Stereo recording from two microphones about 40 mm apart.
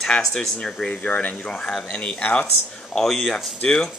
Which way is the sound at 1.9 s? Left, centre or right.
Left.